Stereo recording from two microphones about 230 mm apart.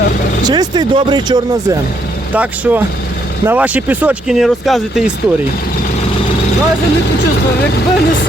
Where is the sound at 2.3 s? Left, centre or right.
Centre.